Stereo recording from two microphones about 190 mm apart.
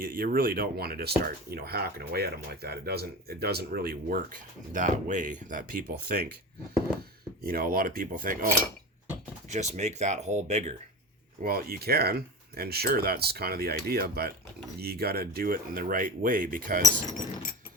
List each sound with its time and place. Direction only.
0.0 s speech: 50° right (ahead or behind)
4.7 s speech: 45° right (ahead or behind)
7.4 s speech: 50° right (ahead or behind)
9.5 s speech: 35° right (ahead or behind)
11.4 s speech: 50° right (ahead or behind)